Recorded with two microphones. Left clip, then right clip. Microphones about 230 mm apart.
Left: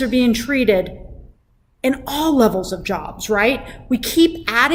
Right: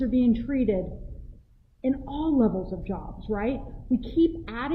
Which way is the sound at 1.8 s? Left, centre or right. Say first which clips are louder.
Left 9 dB; centre.